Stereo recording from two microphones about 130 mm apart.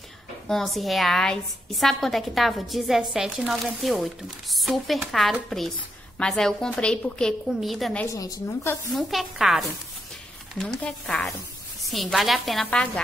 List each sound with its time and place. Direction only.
0.5 s a woman's voice: centre (ahead or behind)
8.1 s a woman's voice: 25° left (ahead or behind)
8.9 s a woman's voice: centre (ahead or behind)